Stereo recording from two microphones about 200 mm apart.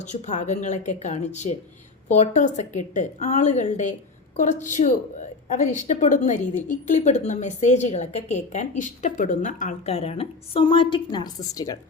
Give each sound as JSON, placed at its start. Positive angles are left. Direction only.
{"t": 0.0, "sound": "a woman's voice", "side_deg": 35}